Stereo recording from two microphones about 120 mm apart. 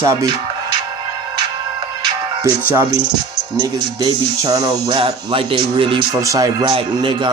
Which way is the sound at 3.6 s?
35° right (ahead or behind).